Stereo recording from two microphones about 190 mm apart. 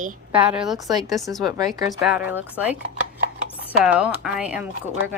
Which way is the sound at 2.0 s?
5° right (ahead or behind).